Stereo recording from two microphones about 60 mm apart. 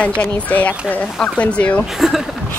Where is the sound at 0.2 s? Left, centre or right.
Left.